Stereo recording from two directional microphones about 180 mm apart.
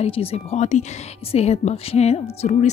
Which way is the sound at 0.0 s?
30° left (ahead or behind).